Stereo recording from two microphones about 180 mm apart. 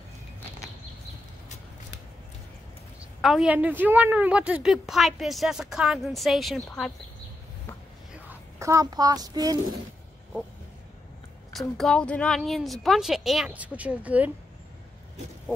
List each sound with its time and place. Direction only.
3.2 s a woman's voice: centre (ahead or behind)
8.3 s a child's voice: 15° right (ahead or behind)
11.5 s a woman's voice: centre (ahead or behind)